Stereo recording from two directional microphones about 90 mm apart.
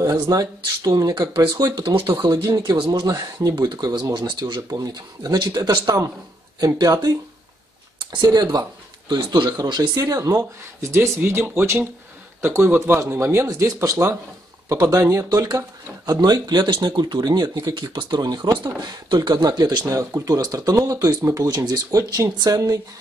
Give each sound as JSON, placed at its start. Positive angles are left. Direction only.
{"t": 0.0, "sound": "speech", "side_deg": -40}
{"t": 10.6, "sound": "speech", "side_deg": -30}
{"t": 14.7, "sound": "speech", "side_deg": -40}